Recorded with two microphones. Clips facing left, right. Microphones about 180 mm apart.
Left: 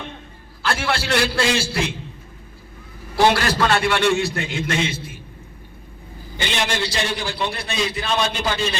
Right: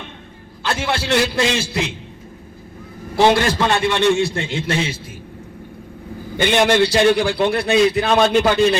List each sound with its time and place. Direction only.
0.6 s a man's voice: 20° right (ahead or behind)
3.2 s a man's voice: 20° right (ahead or behind)
6.3 s a man's voice: 55° right (ahead or behind)